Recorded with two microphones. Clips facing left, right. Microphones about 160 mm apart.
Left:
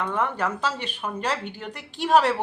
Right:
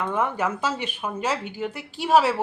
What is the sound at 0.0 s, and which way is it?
Speech, 10° right (ahead or behind).